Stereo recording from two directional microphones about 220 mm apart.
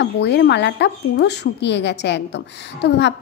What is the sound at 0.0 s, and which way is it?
Speech, 50° left (ahead or behind).